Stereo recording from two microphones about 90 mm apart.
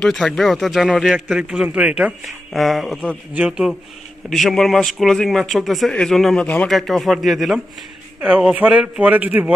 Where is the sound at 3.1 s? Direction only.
15° right (ahead or behind).